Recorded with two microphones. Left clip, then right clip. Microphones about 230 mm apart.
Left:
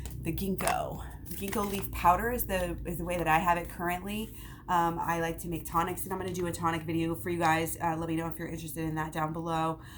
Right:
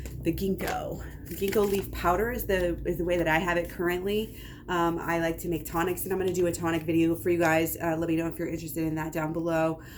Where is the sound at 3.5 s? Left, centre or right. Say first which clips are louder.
Right 3 dB; centre.